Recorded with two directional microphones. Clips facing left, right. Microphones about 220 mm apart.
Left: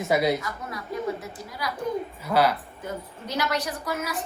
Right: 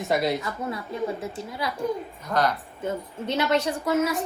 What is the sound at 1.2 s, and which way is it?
Speech, 25° right (ahead or behind).